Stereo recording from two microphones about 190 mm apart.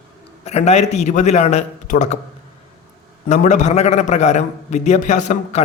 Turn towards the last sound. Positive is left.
turn(degrees=40)  # may be behind; listen again after turning